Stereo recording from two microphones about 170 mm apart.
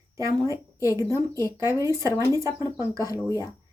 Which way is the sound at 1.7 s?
20° right (ahead or behind).